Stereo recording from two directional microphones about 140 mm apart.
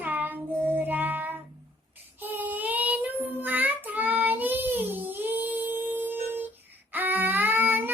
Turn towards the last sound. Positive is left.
turn(degrees=-15)  # may be behind; listen again after turning